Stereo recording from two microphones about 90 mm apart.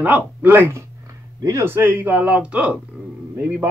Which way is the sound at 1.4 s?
35° right (ahead or behind).